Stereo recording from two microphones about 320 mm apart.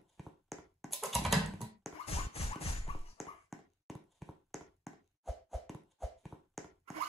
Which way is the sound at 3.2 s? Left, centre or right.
Centre.